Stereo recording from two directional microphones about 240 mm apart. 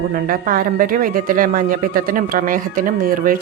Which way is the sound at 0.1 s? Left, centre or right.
Right.